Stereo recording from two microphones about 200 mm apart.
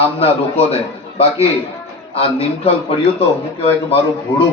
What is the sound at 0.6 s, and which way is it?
Speech, 30° left (ahead or behind).